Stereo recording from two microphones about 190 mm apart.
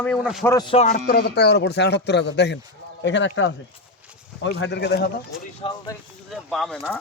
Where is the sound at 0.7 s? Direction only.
35° left (ahead or behind).